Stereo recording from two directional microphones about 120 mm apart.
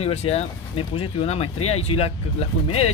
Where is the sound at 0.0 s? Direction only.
60° left (ahead or behind).